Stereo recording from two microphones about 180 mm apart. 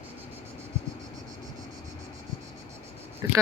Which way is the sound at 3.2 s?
20° right (ahead or behind).